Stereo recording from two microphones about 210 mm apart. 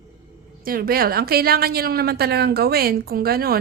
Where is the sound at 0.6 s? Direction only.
45° right (ahead or behind).